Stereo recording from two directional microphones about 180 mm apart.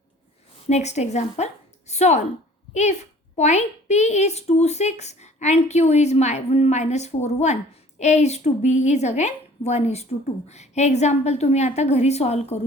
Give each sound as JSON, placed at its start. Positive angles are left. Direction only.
{"t": 0.7, "sound": "a woman's voice", "side_deg": 40}